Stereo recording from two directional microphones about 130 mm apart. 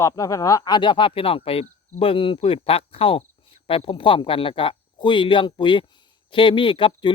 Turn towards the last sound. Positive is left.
turn(degrees=40)  # may be behind; listen again after turning